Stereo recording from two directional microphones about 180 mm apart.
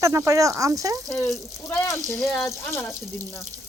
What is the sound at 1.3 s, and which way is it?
Speech, 10° left (ahead or behind).